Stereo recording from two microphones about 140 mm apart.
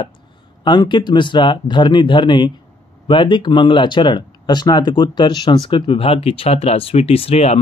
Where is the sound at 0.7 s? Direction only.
35° left (ahead or behind).